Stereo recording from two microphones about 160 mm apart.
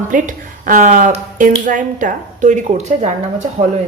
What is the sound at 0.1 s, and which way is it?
Speech, 55° right (ahead or behind).